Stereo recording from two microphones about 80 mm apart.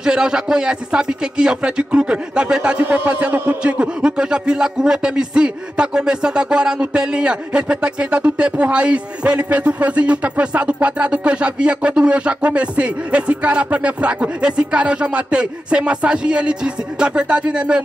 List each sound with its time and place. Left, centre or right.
0.0 s a man's voice: centre